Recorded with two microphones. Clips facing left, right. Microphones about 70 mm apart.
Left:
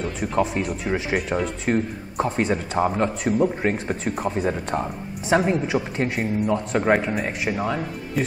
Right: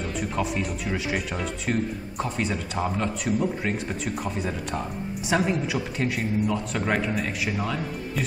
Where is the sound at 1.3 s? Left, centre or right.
Left.